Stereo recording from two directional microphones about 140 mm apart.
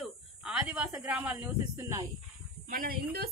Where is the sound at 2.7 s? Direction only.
90° right.